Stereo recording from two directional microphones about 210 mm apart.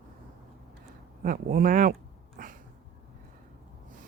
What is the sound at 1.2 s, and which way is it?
Speech, 40° right (ahead or behind).